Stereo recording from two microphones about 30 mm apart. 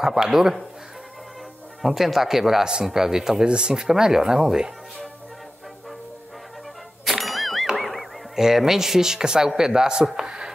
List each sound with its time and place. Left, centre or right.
0.0 s speech: centre
1.8 s speech: centre
3.4 s speech: right
3.7 s speech: centre
7.1 s a sound: centre
8.4 s speech: centre
10.2 s a sound: right